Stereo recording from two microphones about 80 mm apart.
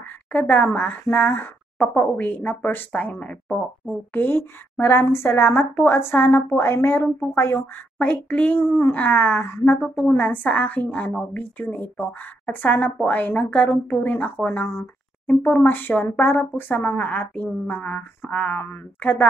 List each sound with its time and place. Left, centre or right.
0.3 s speech: centre
8.5 s speech: left
14.7 s speech: left